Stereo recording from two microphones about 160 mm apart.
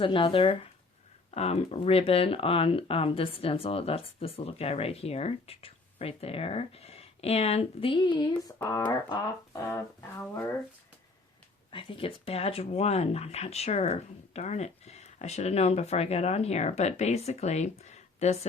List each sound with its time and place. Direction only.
0.0 s speech: 30° left (ahead or behind)
8.4 s speech: 20° left (ahead or behind)
11.7 s speech: 30° left (ahead or behind)